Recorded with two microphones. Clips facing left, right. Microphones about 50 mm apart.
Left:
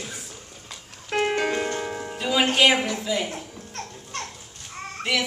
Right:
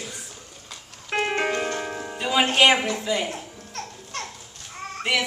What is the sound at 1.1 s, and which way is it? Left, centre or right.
Music, right.